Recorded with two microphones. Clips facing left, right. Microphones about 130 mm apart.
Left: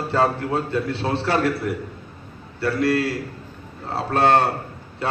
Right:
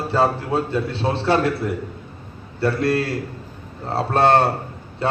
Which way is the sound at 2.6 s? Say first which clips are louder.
Right 1 dB; 30° right (ahead or behind).